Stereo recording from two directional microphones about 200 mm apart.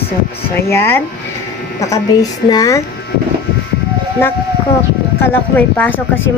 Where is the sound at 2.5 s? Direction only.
20° left (ahead or behind).